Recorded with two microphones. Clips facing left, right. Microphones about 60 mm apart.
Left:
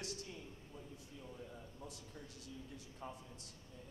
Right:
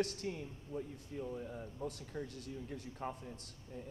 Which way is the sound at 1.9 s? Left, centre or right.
Right.